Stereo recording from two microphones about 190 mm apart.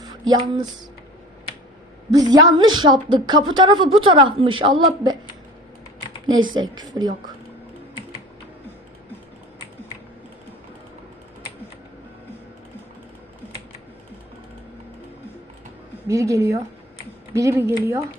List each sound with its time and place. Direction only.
0.0 s a sound: 20° right (ahead or behind)
2.0 s a woman's voice: 20° right (ahead or behind)
6.5 s a woman's voice: 20° right (ahead or behind)
16.0 s a woman's voice: 15° right (ahead or behind)